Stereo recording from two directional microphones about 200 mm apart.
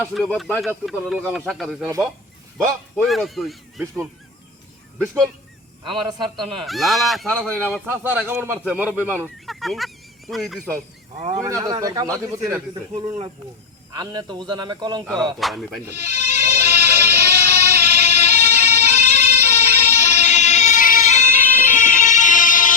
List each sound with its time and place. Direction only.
0.0 s speech: 5° left (ahead or behind)
2.9 s speech: centre (ahead or behind)
4.9 s speech: 5° left (ahead or behind)
5.8 s a man's voice: 25° right (ahead or behind)
6.7 s speech: centre (ahead or behind)
7.6 s speech: 10° right (ahead or behind)
9.2 s fowl: centre (ahead or behind)
11.3 s speech: 15° right (ahead or behind)
14.0 s a man's voice: 20° right (ahead or behind)
15.0 s speech: centre (ahead or behind)
16.1 s music: 35° left (ahead or behind)